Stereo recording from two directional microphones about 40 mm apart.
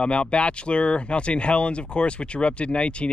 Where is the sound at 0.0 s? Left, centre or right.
Left.